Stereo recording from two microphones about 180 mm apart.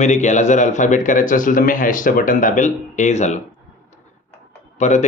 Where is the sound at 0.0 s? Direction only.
40° left (ahead or behind).